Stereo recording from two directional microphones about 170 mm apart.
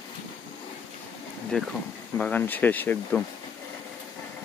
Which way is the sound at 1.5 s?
5° left (ahead or behind).